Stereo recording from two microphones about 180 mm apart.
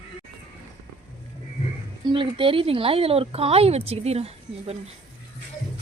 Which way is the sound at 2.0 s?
25° right (ahead or behind).